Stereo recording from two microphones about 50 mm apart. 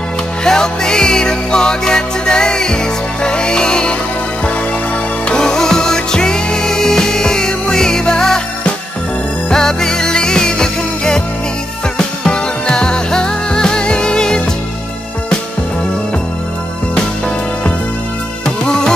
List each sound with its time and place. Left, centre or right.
0.4 s music: centre
5.3 s music: centre
9.5 s music: centre
18.7 s music: centre